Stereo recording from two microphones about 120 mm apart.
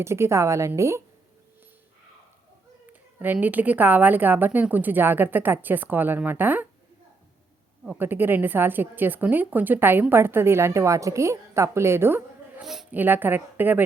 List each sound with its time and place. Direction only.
0.0 s a woman's voice: 20° right (ahead or behind)
3.4 s a woman's voice: 15° right (ahead or behind)
7.9 s a woman's voice: 15° right (ahead or behind)
12.6 s a woman's voice: 5° right (ahead or behind)
12.9 s a woman's voice: 15° right (ahead or behind)